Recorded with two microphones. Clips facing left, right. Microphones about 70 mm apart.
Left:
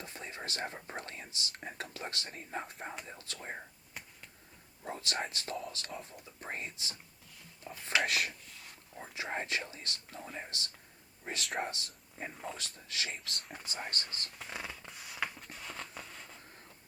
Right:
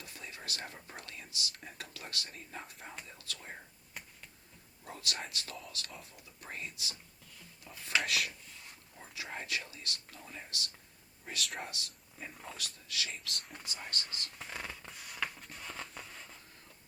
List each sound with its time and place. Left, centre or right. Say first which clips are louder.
0.0 s speech: left 4 dB; left
4.8 s speech: left 4 dB; left
8.0 s speech: left 2 dB; left
9.0 s speech: left 5 dB; left
14.3 s a sound: left 1 dB; centre